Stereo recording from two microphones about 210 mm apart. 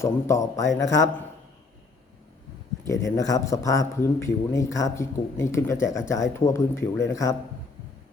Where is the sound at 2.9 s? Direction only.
15° left (ahead or behind).